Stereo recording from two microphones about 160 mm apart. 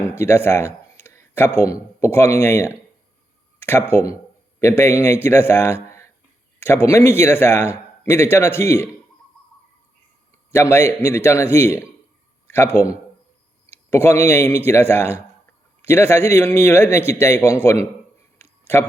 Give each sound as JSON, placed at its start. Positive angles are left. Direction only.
{"t": 0.0, "sound": "speech", "side_deg": 15}
{"t": 10.5, "sound": "speech", "side_deg": 15}